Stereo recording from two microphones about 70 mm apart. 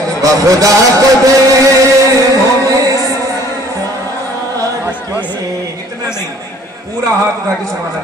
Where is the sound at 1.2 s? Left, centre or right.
Right.